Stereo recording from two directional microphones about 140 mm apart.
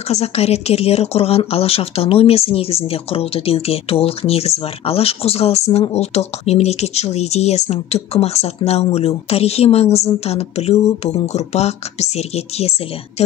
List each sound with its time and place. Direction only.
0.1 s speech: 50° left (ahead or behind)